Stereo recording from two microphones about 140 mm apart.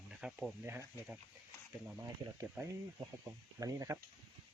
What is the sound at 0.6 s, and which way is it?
Speech, 15° right (ahead or behind).